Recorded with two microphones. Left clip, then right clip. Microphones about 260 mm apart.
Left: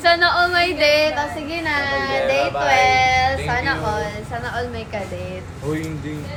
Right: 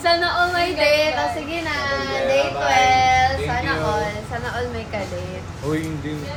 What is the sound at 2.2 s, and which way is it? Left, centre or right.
Music, left.